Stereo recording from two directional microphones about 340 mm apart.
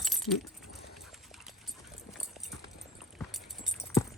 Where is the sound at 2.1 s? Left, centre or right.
Centre.